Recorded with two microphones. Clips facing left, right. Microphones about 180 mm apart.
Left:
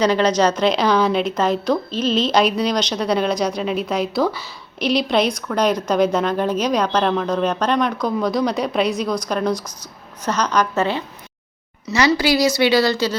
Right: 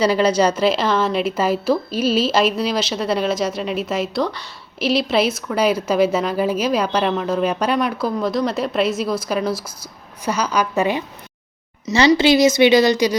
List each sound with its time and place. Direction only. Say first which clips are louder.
0.0 s a woman's voice: even; 5° right (ahead or behind)
11.9 s a woman's voice: right 3 dB; 25° right (ahead or behind)